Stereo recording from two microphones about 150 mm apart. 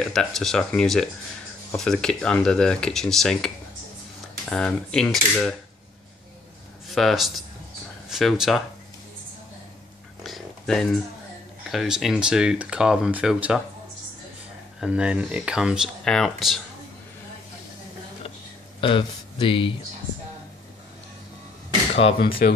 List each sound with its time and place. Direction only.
0.0 s speech: 5° left (ahead or behind)
6.9 s speech: centre (ahead or behind)
10.2 s a sound: centre (ahead or behind)
11.7 s speech: centre (ahead or behind)
14.8 s speech: 5° right (ahead or behind)
18.8 s speech: 35° left (ahead or behind)
22.4 s speech: 70° left (ahead or behind)